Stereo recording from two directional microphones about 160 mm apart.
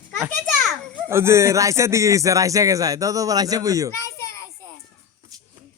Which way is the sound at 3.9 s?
20° left (ahead or behind).